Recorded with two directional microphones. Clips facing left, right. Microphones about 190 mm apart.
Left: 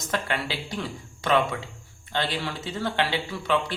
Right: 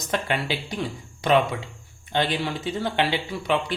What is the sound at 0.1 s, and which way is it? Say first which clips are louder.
Speech: right 3 dB; 20° right (ahead or behind).